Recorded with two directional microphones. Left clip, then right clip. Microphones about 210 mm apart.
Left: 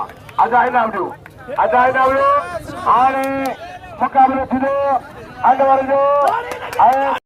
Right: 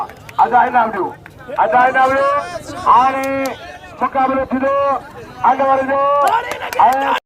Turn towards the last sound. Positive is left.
turn(degrees=20)  # may be behind; listen again after turning